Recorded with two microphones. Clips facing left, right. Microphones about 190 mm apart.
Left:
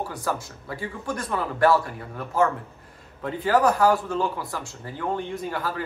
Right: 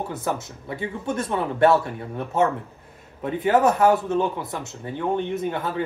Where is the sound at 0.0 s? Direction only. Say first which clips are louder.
Right 2 dB; 20° right (ahead or behind).